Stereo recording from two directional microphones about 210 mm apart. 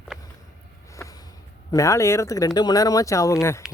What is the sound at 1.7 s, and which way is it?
Speech, 15° left (ahead or behind).